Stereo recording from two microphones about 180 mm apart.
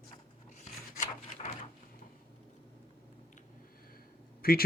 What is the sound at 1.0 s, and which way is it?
Drawer open or close, 45° left (ahead or behind).